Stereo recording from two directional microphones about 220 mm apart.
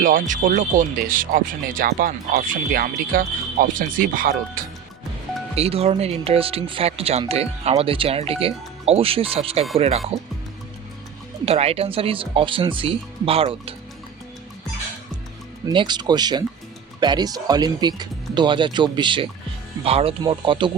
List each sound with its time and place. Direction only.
0.0 s speech: 40° right (ahead or behind)
5.5 s speech: 30° right (ahead or behind)
11.4 s speech: 25° right (ahead or behind)
15.6 s speech: 20° right (ahead or behind)